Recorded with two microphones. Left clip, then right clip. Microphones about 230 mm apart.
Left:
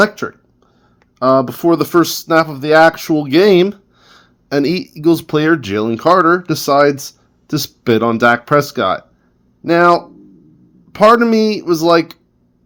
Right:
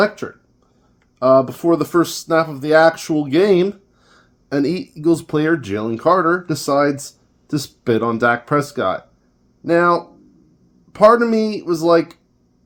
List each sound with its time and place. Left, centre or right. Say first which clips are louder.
0.0 s speech: left 4 dB; left